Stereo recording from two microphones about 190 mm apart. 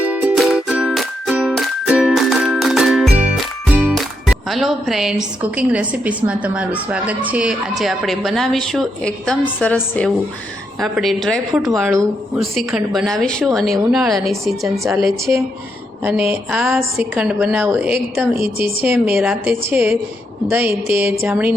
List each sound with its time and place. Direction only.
0.0 s music: 10° right (ahead or behind)
7.8 s a woman's voice: centre (ahead or behind)
18.3 s a woman's voice: 30° left (ahead or behind)
18.8 s a woman's voice: 10° right (ahead or behind)